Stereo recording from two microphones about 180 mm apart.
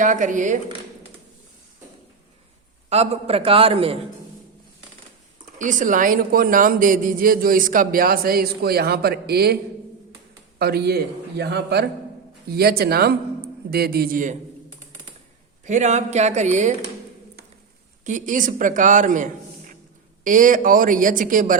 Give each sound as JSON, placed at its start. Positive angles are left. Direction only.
{"t": 0.0, "sound": "a woman's voice", "side_deg": -45}
{"t": 2.9, "sound": "a man's voice", "side_deg": -35}
{"t": 5.5, "sound": "a woman's voice", "side_deg": -45}
{"t": 10.6, "sound": "a man's voice", "side_deg": -65}
{"t": 15.6, "sound": "a man's voice", "side_deg": -40}
{"t": 18.0, "sound": "a man's voice", "side_deg": -45}